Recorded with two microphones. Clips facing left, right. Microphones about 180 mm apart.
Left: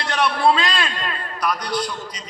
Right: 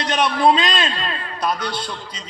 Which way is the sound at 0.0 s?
20° right (ahead or behind).